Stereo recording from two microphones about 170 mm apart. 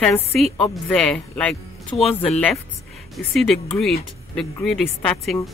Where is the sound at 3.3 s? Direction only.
Centre (ahead or behind).